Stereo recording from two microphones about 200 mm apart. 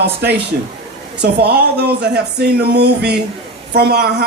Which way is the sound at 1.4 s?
55° right (ahead or behind).